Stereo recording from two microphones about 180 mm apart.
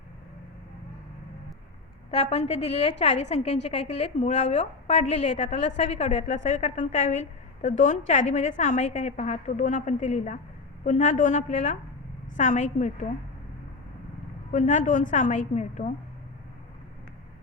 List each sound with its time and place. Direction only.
2.0 s a woman's voice: 35° left (ahead or behind)
14.5 s a woman's voice: 45° left (ahead or behind)